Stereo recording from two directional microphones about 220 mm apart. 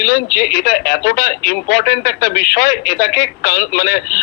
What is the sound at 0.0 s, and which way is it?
Speech, 45° left (ahead or behind).